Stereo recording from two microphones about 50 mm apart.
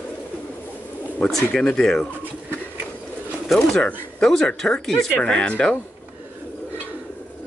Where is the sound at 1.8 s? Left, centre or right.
Centre.